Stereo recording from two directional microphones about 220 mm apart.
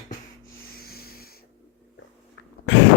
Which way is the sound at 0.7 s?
45° left (ahead or behind).